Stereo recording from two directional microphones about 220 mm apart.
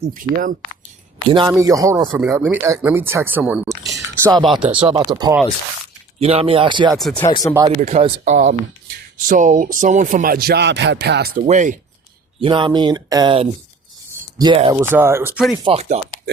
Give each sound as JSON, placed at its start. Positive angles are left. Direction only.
{"t": 0.0, "sound": "speech", "side_deg": -40}
{"t": 1.3, "sound": "speech", "side_deg": -20}
{"t": 4.1, "sound": "speech", "side_deg": -15}
{"t": 4.4, "sound": "speech", "side_deg": 0}
{"t": 4.7, "sound": "speech", "side_deg": -25}
{"t": 6.1, "sound": "speech", "side_deg": -25}
{"t": 7.2, "sound": "speech", "side_deg": 20}
{"t": 7.7, "sound": "speech", "side_deg": -35}
{"t": 12.4, "sound": "speech", "side_deg": -20}
{"t": 14.8, "sound": "speech", "side_deg": -10}
{"t": 15.6, "sound": "speech", "side_deg": -30}